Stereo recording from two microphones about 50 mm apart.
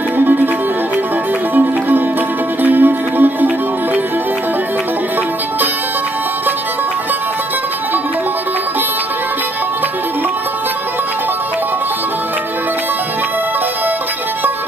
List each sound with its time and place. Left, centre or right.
1.5 s music: right